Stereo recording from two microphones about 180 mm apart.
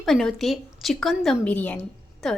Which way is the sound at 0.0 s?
Centre (ahead or behind).